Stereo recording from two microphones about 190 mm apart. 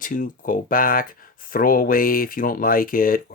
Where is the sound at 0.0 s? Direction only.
45° left (ahead or behind).